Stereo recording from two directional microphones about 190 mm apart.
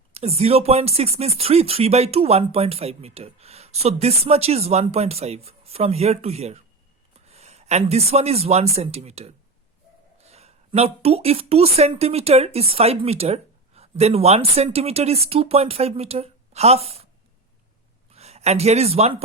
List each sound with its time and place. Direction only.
0.1 s a man's voice: 35° right (ahead or behind)
18.1 s speech: 35° right (ahead or behind)